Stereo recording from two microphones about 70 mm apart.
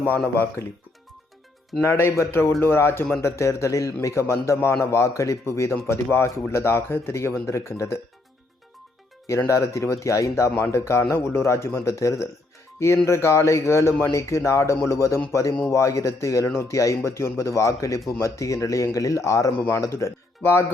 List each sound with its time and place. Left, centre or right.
0.6 s speech: left
1.8 s a man's voice: left
9.2 s a man's voice: left
20.4 s speech: left